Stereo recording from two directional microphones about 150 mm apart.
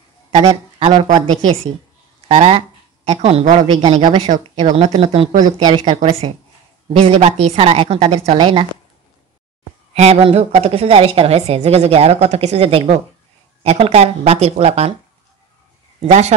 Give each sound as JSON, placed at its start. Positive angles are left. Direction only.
{"t": 0.3, "sound": "a woman's voice", "side_deg": -45}
{"t": 6.9, "sound": "a woman's voice", "side_deg": -45}
{"t": 9.9, "sound": "a woman's voice", "side_deg": -45}
{"t": 16.0, "sound": "a woman's voice", "side_deg": -45}